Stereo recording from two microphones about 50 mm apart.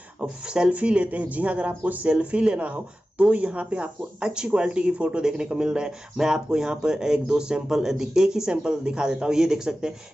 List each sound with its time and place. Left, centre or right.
0.2 s speech: right